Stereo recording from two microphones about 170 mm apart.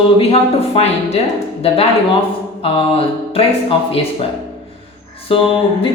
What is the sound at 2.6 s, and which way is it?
A woman's voice, 35° left (ahead or behind).